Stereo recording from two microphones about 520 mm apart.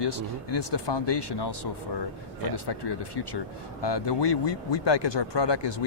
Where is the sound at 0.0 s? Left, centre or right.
Left.